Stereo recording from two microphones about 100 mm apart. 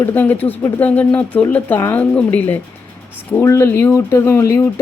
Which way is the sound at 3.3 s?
25° left (ahead or behind).